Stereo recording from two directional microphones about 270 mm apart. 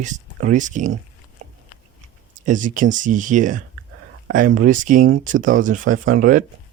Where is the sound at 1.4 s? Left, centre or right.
Right.